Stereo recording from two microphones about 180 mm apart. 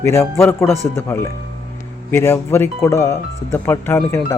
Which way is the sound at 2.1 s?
15° left (ahead or behind).